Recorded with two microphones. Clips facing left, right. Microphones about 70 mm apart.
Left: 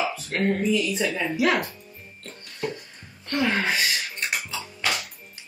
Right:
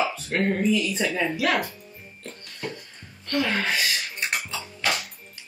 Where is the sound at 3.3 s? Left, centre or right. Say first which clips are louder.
Left 1 dB; centre.